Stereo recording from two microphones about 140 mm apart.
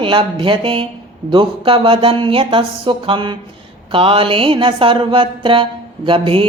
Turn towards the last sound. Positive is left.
turn(degrees=-40)  # may be behind; listen again after turning